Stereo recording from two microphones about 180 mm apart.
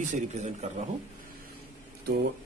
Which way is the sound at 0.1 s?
40° right (ahead or behind).